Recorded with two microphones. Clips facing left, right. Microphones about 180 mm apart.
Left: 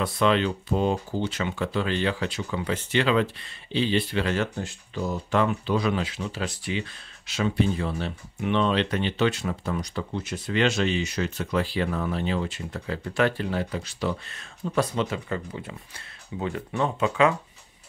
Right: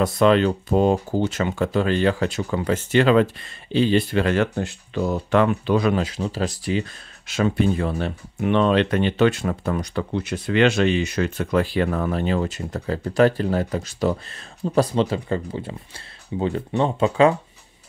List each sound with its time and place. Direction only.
0.0 s speech: 45° right (ahead or behind)